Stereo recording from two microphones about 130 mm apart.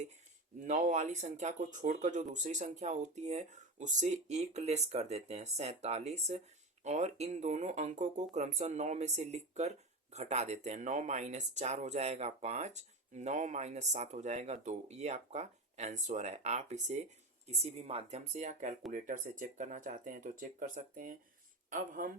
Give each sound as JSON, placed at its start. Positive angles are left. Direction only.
{"t": 0.7, "sound": "speech", "side_deg": -65}
{"t": 18.9, "sound": "speech", "side_deg": -80}